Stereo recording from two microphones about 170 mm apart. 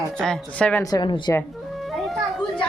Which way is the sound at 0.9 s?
25° left (ahead or behind).